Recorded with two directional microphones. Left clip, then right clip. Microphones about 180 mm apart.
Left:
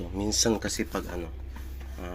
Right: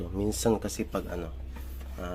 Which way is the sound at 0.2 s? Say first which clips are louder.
Left 1 dB; 25° right (ahead or behind).